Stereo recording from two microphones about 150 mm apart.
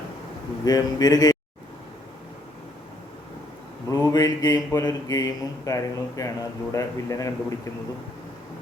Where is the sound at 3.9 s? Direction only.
20° left (ahead or behind).